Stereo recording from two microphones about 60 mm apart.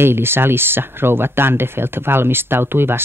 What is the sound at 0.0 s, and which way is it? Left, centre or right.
Speech, right.